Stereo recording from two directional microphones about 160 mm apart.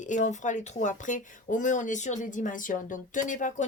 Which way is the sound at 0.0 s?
50° left (ahead or behind).